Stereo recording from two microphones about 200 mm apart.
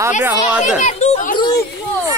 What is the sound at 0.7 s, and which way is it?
Speech, 35° left (ahead or behind).